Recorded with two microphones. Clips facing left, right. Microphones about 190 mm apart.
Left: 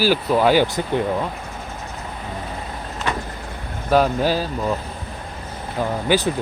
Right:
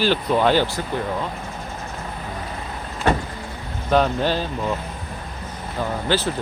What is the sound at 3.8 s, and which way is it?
Speech, 5° left (ahead or behind).